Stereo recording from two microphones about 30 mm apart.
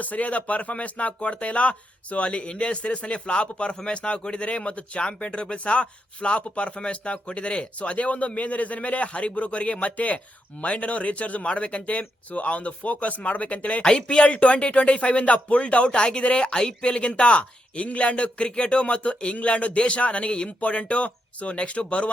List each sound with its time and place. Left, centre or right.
0.0 s speech: left
13.8 s speech: left
19.4 s speech: left